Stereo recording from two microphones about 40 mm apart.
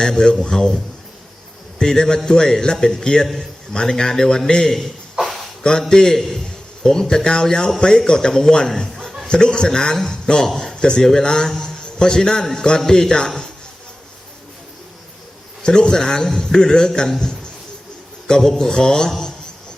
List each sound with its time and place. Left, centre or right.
0.0 s a man's voice: centre
1.8 s a man's voice: centre
5.9 s a man's voice: centre
11.5 s a sound: centre
12.5 s a man's voice: centre
15.6 s a man's voice: left